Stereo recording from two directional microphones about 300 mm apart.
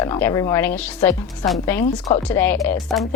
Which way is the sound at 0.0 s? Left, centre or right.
Centre.